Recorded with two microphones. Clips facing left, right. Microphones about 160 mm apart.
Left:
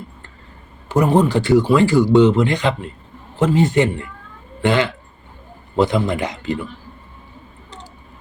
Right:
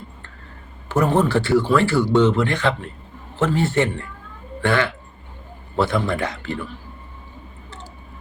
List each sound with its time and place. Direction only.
0.9 s speech: 15° left (ahead or behind)